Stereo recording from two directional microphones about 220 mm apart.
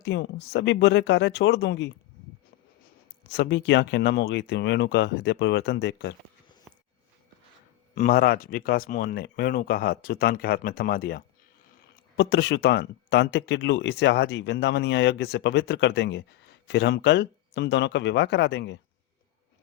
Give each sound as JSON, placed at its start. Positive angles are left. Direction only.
{"t": 0.0, "sound": "speech", "side_deg": 50}
{"t": 3.2, "sound": "speech", "side_deg": 50}
{"t": 7.9, "sound": "speech", "side_deg": 40}